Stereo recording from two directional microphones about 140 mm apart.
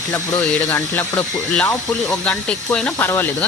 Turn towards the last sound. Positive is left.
turn(degrees=15)  # may be behind; listen again after turning